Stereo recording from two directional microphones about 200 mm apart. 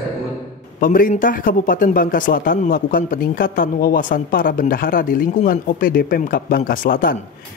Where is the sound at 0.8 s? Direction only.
45° left (ahead or behind).